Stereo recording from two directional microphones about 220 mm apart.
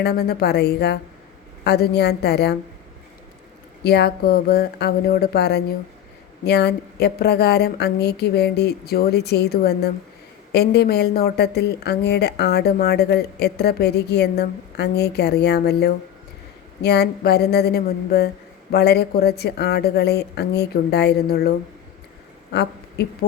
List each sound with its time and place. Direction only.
0.0 s a woman's voice: 45° left (ahead or behind)
3.8 s a woman's voice: 45° left (ahead or behind)
22.5 s a woman's voice: 50° left (ahead or behind)